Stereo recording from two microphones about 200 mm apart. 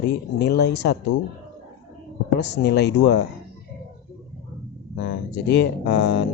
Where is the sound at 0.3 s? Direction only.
55° left (ahead or behind).